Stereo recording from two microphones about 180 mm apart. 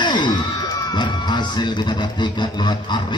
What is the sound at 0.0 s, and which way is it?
Speech, 25° left (ahead or behind).